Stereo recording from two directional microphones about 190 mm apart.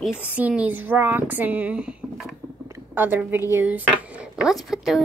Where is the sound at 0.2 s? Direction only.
5° right (ahead or behind).